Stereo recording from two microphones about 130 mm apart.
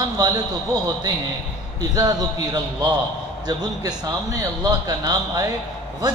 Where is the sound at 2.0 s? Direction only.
30° right (ahead or behind).